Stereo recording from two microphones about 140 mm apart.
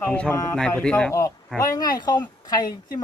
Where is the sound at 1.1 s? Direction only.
20° left (ahead or behind).